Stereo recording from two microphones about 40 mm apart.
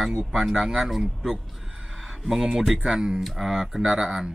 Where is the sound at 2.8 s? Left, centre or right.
Centre.